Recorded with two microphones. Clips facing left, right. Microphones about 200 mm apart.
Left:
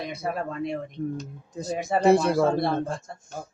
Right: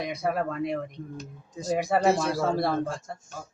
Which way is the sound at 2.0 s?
60° left (ahead or behind).